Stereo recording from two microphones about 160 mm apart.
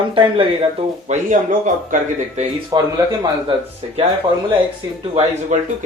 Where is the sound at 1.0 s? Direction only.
50° right (ahead or behind).